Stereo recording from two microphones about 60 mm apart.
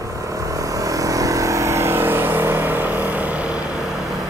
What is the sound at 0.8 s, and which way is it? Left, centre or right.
Vehicle, right.